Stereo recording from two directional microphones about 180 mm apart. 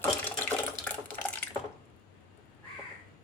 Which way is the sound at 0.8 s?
10° left (ahead or behind).